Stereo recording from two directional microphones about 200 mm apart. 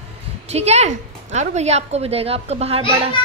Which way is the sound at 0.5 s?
35° right (ahead or behind).